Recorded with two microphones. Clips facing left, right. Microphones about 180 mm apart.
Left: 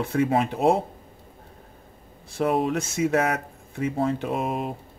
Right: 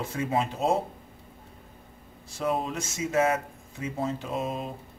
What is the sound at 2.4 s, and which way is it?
A man's voice, 65° left (ahead or behind).